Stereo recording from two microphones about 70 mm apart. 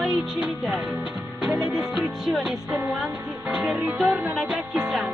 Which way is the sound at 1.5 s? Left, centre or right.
Centre.